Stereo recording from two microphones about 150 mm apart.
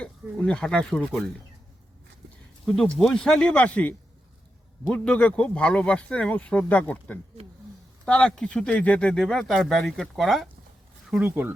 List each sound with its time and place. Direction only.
0.0 s speech: 5° left (ahead or behind)
2.6 s speech: 5° left (ahead or behind)
11.1 s speech: 15° right (ahead or behind)